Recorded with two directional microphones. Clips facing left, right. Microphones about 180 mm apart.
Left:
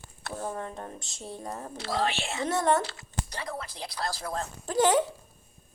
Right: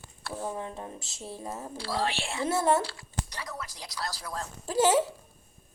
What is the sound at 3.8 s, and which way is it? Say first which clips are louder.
Speech: left 5 dB; 50° left (ahead or behind).